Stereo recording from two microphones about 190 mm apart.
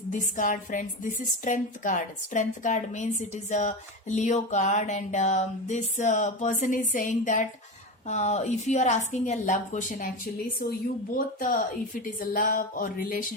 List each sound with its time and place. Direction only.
0.1 s a woman's voice: 40° left (ahead or behind)
11.3 s music: 45° left (ahead or behind)